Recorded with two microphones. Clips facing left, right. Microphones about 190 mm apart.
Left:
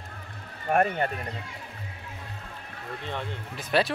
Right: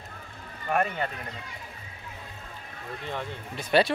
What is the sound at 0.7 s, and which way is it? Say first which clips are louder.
Speech: left 3 dB; 45° left (ahead or behind).